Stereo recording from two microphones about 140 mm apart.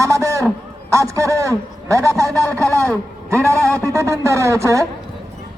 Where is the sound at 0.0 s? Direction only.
20° right (ahead or behind).